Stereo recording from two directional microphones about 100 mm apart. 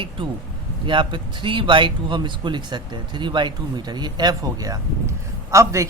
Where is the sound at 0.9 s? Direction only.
55° right (ahead or behind).